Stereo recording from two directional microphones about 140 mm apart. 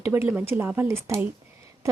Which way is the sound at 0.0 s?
15° right (ahead or behind).